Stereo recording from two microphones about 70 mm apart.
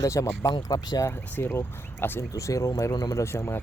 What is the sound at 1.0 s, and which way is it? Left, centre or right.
Speech, left.